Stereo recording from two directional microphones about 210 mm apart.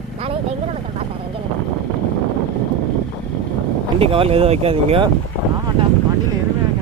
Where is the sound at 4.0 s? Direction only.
25° right (ahead or behind).